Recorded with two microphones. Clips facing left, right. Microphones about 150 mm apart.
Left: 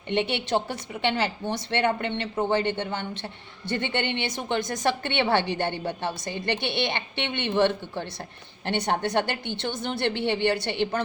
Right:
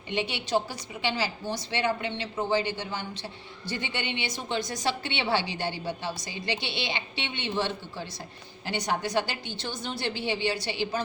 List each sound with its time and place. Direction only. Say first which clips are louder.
0.1 s a woman's voice: left 3 dB; 60° left (ahead or behind)